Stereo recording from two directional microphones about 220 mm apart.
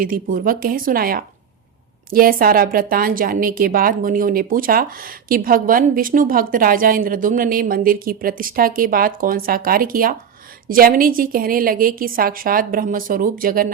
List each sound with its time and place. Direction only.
0.0 s a woman's voice: 40° right (ahead or behind)